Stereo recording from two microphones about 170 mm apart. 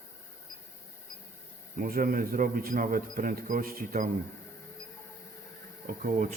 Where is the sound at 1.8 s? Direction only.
55° right (ahead or behind).